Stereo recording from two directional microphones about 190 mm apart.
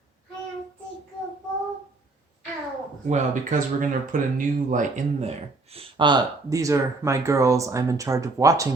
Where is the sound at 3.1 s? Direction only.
45° right (ahead or behind).